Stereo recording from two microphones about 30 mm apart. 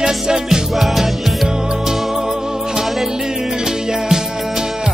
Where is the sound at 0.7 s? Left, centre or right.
Centre.